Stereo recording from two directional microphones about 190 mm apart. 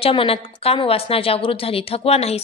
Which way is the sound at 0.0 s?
30° left (ahead or behind).